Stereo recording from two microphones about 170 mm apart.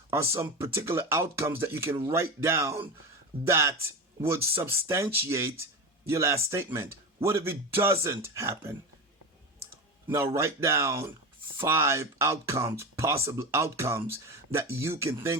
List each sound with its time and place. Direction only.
0.1 s speech: 15° right (ahead or behind)
10.1 s speech: 15° right (ahead or behind)